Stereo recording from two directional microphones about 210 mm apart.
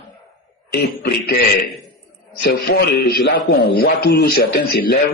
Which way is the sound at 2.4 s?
50° left (ahead or behind).